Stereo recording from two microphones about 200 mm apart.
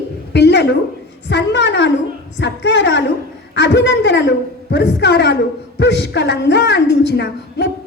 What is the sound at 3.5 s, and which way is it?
A woman's voice, 60° left (ahead or behind).